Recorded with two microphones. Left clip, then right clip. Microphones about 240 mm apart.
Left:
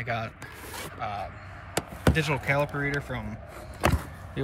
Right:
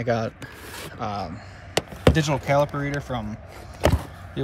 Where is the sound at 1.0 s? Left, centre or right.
Centre.